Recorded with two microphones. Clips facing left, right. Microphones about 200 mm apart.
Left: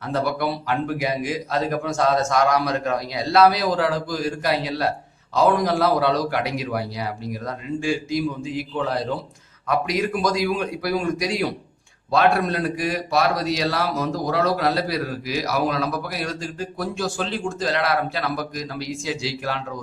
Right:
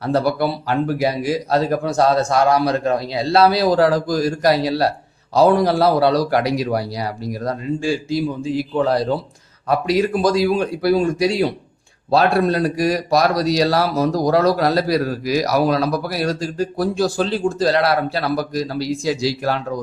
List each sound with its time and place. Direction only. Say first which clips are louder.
0.0 s a man's voice: right 5 dB; 35° right (ahead or behind)